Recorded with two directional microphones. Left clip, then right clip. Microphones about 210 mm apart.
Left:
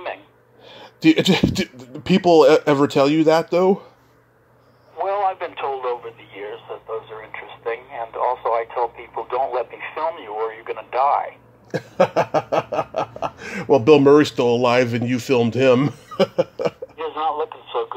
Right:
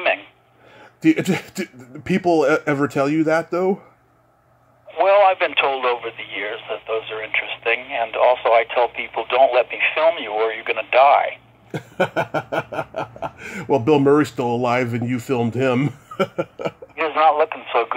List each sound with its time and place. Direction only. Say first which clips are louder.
0.7 s speech: left 2 dB; centre (ahead or behind)
4.9 s radio: right 7 dB; 25° right (ahead or behind)
11.7 s a sound: left 3 dB; 5° right (ahead or behind)
13.4 s speech: left 3 dB; 5° right (ahead or behind)
16.3 s a sound: left 4 dB; centre (ahead or behind)
16.9 s radio: right 7 dB; 25° right (ahead or behind)